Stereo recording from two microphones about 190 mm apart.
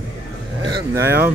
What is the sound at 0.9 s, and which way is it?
Speech, 10° right (ahead or behind).